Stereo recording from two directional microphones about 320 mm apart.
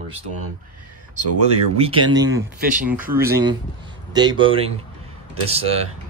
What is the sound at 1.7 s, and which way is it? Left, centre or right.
Speech, centre.